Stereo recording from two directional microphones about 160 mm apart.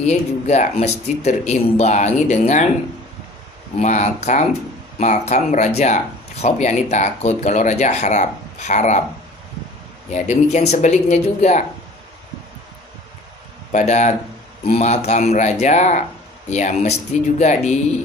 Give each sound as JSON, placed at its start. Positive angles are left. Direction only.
{"t": 0.0, "sound": "speech", "side_deg": 45}
{"t": 3.7, "sound": "speech", "side_deg": 50}
{"t": 10.1, "sound": "speech", "side_deg": 45}
{"t": 13.7, "sound": "speech", "side_deg": 50}